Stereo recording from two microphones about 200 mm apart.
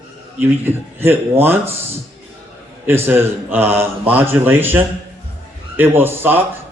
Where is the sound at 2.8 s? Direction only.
10° right (ahead or behind).